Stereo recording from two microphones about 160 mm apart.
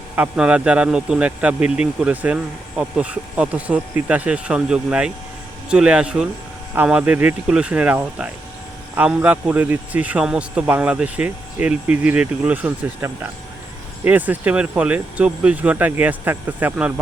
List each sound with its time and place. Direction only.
0.2 s speech: 10° right (ahead or behind)